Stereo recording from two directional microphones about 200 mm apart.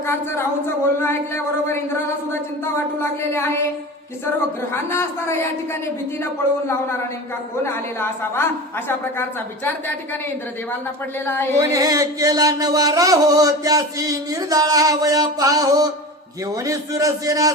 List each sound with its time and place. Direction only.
0.1 s a woman's voice: 10° left (ahead or behind)
3.0 s a woman's voice: 10° left (ahead or behind)
4.7 s a woman's voice: 15° left (ahead or behind)
7.6 s a woman's voice: 10° left (ahead or behind)
11.5 s music: 15° right (ahead or behind)